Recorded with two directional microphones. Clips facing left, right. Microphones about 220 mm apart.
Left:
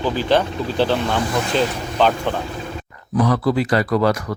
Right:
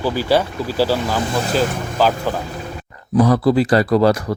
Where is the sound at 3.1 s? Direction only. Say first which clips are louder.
Right 4 dB; 30° right (ahead or behind).